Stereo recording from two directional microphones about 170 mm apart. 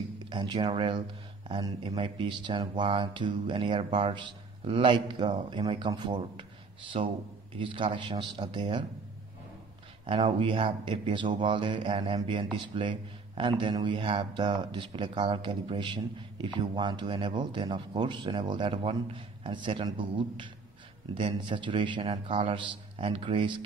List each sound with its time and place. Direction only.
0.3 s speech: 25° right (ahead or behind)
6.9 s speech: 40° right (ahead or behind)
10.0 s speech: 30° right (ahead or behind)